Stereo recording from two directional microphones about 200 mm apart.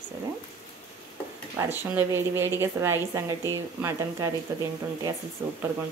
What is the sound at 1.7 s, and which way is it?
A woman's voice, 10° right (ahead or behind).